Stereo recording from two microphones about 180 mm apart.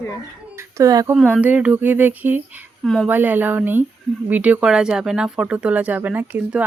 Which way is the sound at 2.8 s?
Centre (ahead or behind).